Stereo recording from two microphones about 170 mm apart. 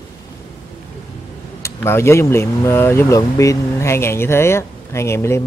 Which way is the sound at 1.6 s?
15° left (ahead or behind).